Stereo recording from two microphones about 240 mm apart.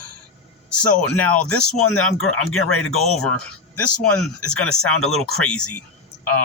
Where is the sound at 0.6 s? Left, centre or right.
Centre.